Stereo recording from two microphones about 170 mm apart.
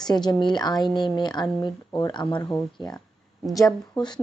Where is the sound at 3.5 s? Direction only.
20° left (ahead or behind).